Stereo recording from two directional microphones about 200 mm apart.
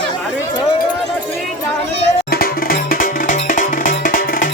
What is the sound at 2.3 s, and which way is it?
Music, 50° left (ahead or behind).